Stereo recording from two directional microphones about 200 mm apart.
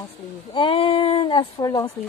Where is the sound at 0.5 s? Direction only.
25° left (ahead or behind).